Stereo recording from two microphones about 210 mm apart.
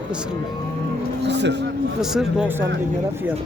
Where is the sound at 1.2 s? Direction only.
55° right (ahead or behind).